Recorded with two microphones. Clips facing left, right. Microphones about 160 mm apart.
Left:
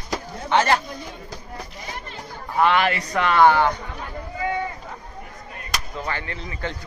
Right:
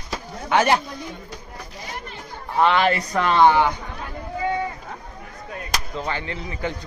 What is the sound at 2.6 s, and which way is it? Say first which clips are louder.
A man's voice: right 1 dB; 25° right (ahead or behind).